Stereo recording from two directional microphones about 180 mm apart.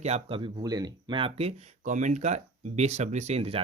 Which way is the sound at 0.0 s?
35° right (ahead or behind).